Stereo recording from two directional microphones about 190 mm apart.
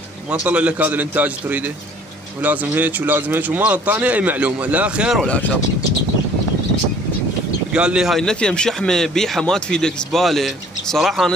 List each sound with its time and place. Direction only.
0.3 s speech: 5° right (ahead or behind)
7.7 s speech: 5° right (ahead or behind)